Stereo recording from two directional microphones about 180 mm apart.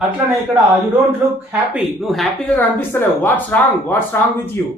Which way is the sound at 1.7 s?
5° right (ahead or behind).